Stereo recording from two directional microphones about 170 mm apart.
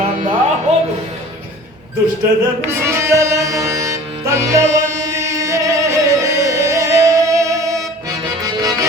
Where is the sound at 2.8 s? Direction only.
15° right (ahead or behind).